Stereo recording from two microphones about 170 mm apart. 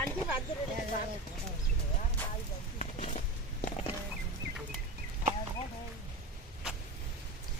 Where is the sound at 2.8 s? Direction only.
45° left (ahead or behind).